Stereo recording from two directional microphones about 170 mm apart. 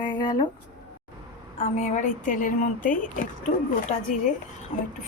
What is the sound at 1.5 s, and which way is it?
Speech, 40° left (ahead or behind).